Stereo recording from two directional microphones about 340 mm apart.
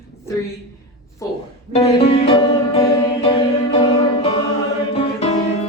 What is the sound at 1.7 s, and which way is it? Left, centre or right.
Music, centre.